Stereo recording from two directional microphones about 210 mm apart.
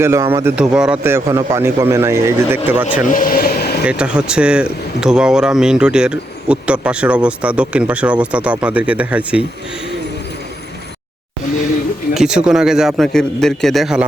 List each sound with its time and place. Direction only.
0.0 s a man's voice: 15° right (ahead or behind)
3.1 s vehicle: 40° left (ahead or behind)
3.8 s speech: 5° right (ahead or behind)
12.1 s speech: 5° right (ahead or behind)